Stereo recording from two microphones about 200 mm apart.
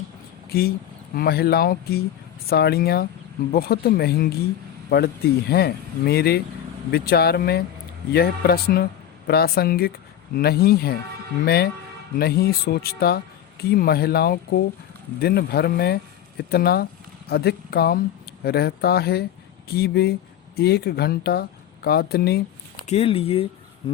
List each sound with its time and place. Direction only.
1.1 s speech: 50° left (ahead or behind)
22.9 s speech: 30° left (ahead or behind)